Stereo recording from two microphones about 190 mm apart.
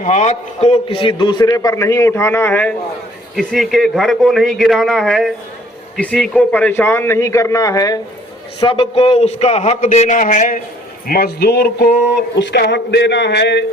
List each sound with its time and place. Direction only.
0.0 s a man's voice: 40° left (ahead or behind); by 2.7 s 10° left (ahead or behind)
3.3 s a man's voice: centre (ahead or behind); by 8.0 s 20° left (ahead or behind)
8.6 s a man's voice: 30° left (ahead or behind); by 10.6 s 45° left (ahead or behind)
11.1 s a man's voice: 55° left (ahead or behind)